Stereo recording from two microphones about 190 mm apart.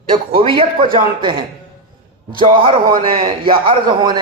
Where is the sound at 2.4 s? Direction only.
25° right (ahead or behind).